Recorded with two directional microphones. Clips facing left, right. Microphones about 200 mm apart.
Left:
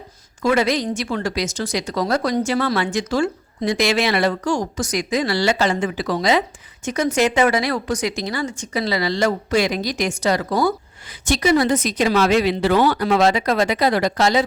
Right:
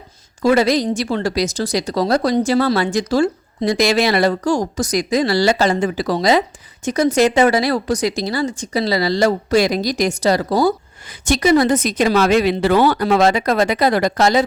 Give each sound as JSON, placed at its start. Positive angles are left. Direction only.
{"t": 0.4, "sound": "speech", "side_deg": -35}
{"t": 11.1, "sound": "a woman's voice", "side_deg": -45}